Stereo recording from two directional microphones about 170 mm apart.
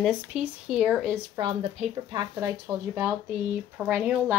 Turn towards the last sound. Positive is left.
turn(degrees=-10)  # may be behind; listen again after turning